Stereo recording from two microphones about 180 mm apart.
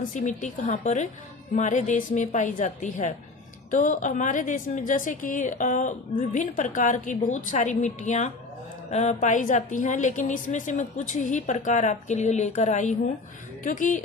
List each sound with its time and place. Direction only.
0.1 s a woman's voice: 40° left (ahead or behind)